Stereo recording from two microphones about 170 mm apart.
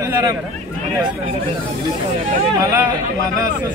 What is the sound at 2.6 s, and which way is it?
Speech, 20° right (ahead or behind).